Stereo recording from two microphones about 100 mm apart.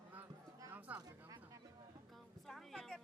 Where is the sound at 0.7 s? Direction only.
15° right (ahead or behind).